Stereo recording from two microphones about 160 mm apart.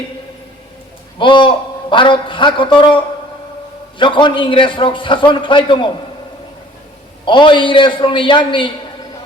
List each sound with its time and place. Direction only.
1.2 s a man's voice: 30° left (ahead or behind)
7.3 s a man's voice: 30° left (ahead or behind)